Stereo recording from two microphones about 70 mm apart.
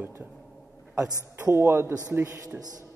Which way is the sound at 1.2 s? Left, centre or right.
Right.